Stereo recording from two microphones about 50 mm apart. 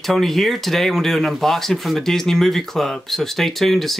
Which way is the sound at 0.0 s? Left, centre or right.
Centre.